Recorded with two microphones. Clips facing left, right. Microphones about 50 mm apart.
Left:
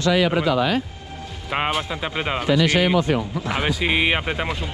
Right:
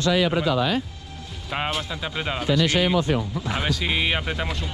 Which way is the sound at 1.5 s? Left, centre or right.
Centre.